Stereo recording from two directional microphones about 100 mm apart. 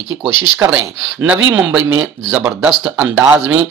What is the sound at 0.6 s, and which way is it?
Speech, 15° right (ahead or behind).